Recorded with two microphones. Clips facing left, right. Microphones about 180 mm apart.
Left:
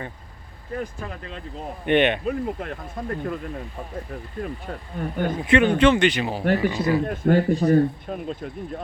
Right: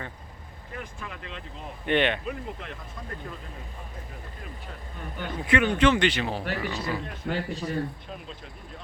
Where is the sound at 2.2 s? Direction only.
45° left (ahead or behind).